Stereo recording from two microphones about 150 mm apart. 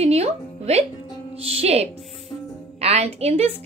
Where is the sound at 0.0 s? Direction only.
45° right (ahead or behind).